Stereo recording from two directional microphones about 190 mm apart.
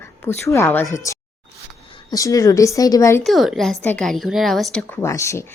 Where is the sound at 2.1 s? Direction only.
20° left (ahead or behind).